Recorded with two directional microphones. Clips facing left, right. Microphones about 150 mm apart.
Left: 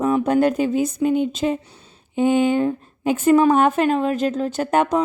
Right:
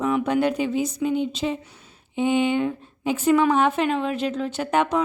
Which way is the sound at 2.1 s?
45° left (ahead or behind).